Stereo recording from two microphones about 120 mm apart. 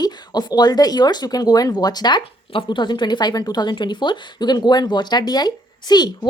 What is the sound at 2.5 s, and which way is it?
Speech, 45° left (ahead or behind).